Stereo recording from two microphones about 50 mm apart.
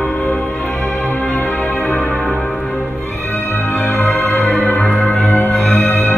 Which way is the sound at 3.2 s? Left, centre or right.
Left.